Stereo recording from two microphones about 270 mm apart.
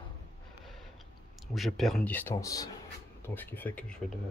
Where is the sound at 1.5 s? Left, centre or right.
Centre.